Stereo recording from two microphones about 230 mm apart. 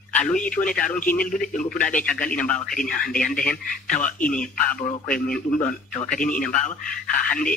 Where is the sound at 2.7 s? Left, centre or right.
Left.